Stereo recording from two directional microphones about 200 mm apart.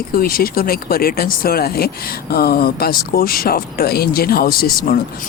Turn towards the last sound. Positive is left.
turn(degrees=50)  # may be behind; listen again after turning